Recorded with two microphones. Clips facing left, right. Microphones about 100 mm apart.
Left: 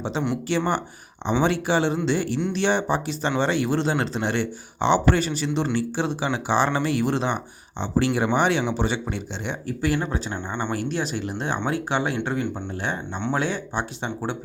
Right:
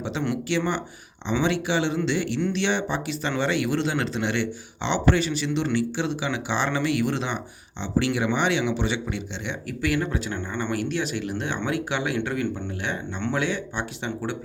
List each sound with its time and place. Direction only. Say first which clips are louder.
0.0 s speech: left 1 dB; 35° left (ahead or behind)
10.3 s speech: left 1 dB; 20° left (ahead or behind)
10.7 s speech: right 1 dB; 35° left (ahead or behind)